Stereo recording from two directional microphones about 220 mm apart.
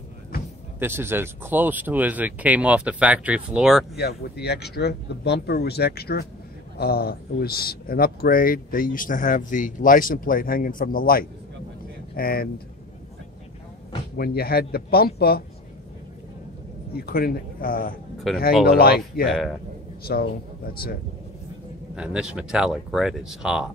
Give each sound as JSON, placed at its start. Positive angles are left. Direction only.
{"t": 0.7, "sound": "speech", "side_deg": -10}
{"t": 3.9, "sound": "speech", "side_deg": 50}
{"t": 14.1, "sound": "speech", "side_deg": 45}
{"t": 16.9, "sound": "speech", "side_deg": 45}
{"t": 18.3, "sound": "speech", "side_deg": 0}
{"t": 18.7, "sound": "speech", "side_deg": 45}
{"t": 19.2, "sound": "speech", "side_deg": 0}
{"t": 20.1, "sound": "speech", "side_deg": 45}
{"t": 21.9, "sound": "speech", "side_deg": -5}